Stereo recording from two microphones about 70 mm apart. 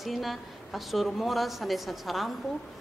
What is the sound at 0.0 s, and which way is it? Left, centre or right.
A woman's voice, centre.